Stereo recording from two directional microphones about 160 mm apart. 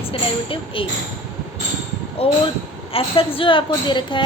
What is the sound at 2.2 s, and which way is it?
A woman's voice, 40° left (ahead or behind).